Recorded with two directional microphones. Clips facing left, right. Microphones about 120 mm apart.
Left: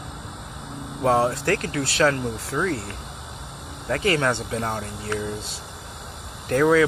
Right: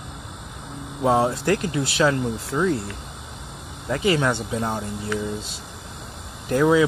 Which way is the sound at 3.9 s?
15° right (ahead or behind).